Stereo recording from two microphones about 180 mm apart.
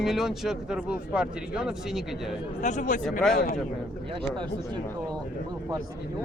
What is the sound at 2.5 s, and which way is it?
Speech, 45° left (ahead or behind).